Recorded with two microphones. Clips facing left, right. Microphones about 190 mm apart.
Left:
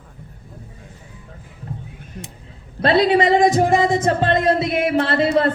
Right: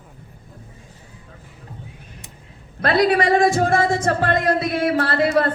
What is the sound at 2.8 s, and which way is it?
A man's voice, 25° left (ahead or behind).